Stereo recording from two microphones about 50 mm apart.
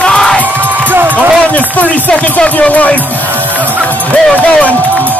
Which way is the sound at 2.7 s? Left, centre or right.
Left.